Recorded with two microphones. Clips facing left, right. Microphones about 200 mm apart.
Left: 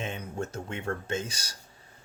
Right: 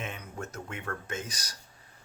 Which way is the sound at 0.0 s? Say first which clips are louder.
Left 5 dB; 30° left (ahead or behind).